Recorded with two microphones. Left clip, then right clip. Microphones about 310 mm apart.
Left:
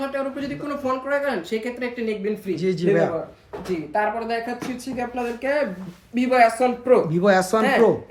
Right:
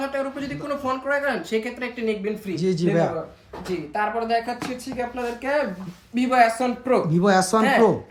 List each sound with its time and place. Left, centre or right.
0.0 s speech: centre